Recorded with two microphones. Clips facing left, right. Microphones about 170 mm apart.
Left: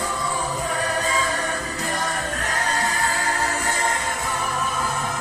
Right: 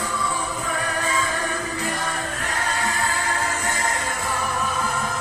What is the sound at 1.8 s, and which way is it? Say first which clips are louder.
Music: left 1 dB; 40° left (ahead or behind).